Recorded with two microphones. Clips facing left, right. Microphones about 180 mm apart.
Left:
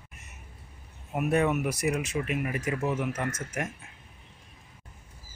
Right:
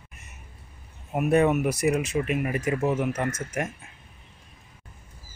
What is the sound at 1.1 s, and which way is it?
Speech, 30° right (ahead or behind).